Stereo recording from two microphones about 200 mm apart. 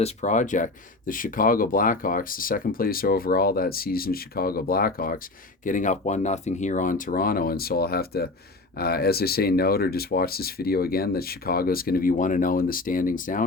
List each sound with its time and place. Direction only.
0.0 s speech: 35° left (ahead or behind)